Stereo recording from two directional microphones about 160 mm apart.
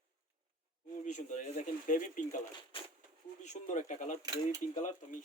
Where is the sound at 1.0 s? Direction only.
50° left (ahead or behind).